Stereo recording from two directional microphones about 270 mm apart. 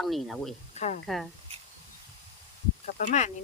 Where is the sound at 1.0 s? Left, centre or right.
Centre.